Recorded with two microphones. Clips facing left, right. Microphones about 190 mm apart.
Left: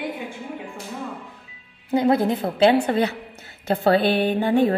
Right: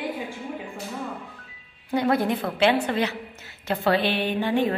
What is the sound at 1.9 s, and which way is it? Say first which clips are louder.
Speech: left 4 dB; 25° left (ahead or behind).